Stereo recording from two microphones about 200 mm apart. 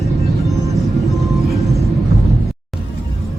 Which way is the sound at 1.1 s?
Centre (ahead or behind).